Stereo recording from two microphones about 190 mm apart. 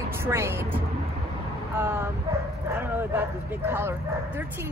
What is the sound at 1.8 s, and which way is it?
Speech, 10° right (ahead or behind).